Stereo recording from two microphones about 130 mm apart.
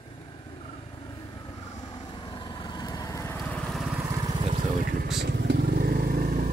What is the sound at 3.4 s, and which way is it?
Lawn mower, 5° left (ahead or behind).